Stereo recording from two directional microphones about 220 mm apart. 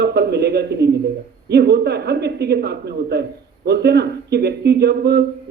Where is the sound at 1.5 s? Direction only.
50° right (ahead or behind).